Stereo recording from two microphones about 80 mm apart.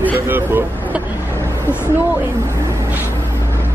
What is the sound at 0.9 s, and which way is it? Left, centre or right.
Vehicle, right.